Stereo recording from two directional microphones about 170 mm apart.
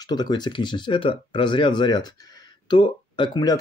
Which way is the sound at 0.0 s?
25° left (ahead or behind).